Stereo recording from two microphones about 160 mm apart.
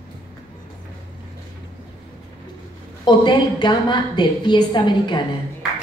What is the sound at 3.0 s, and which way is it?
A woman's voice, 30° left (ahead or behind).